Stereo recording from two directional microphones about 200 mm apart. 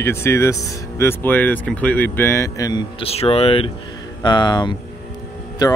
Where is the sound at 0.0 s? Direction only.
10° left (ahead or behind).